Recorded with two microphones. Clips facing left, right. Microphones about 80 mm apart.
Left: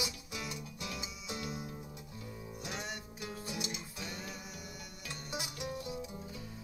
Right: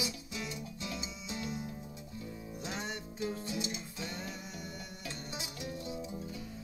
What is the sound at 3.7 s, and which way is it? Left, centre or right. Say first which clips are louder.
Music: right 2 dB; centre.